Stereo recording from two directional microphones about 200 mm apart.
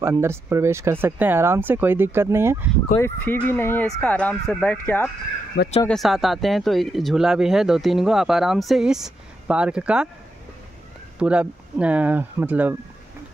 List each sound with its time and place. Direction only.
0.0 s speech: 15° right (ahead or behind)
3.0 s speech: 10° left (ahead or behind)
5.5 s speech: 55° left (ahead or behind)
5.9 s speech: centre (ahead or behind)
11.1 s speech: 5° right (ahead or behind)